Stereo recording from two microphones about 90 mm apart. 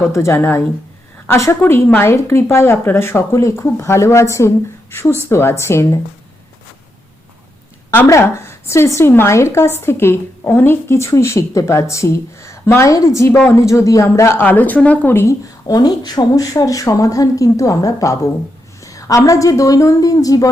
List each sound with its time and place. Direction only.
0.0 s a woman's voice: 30° left (ahead or behind)
7.9 s a woman's voice: 35° left (ahead or behind)
15.6 s a woman's voice: 50° left (ahead or behind)